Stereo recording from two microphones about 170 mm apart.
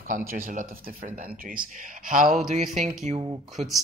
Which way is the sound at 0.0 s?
55° right (ahead or behind).